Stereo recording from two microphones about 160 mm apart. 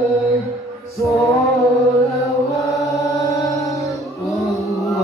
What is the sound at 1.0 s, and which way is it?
Music, 20° left (ahead or behind).